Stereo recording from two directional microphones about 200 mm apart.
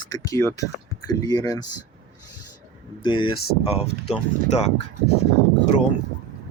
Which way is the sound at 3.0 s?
25° left (ahead or behind).